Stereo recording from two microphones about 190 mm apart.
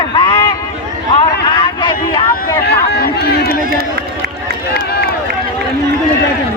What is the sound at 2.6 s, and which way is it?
Run, 60° left (ahead or behind).